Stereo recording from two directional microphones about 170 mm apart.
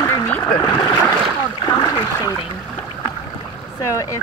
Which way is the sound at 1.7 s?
25° left (ahead or behind).